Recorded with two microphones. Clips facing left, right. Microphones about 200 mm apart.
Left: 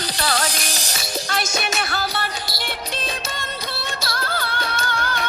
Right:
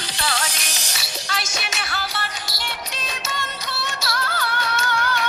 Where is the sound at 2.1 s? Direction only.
35° left (ahead or behind).